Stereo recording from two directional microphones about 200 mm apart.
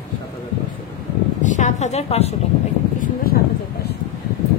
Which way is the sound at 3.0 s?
50° left (ahead or behind).